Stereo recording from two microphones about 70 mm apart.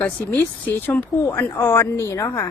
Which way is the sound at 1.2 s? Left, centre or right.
Left.